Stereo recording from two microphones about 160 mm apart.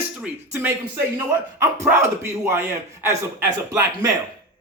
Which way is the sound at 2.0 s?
15° right (ahead or behind).